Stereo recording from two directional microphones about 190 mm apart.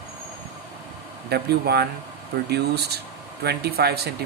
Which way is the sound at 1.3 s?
55° right (ahead or behind).